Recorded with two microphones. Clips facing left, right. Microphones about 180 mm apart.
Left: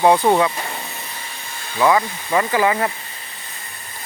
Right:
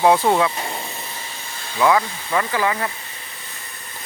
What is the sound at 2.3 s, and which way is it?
Speech, 15° left (ahead or behind).